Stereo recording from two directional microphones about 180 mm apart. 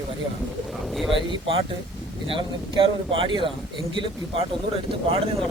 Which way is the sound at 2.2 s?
30° right (ahead or behind).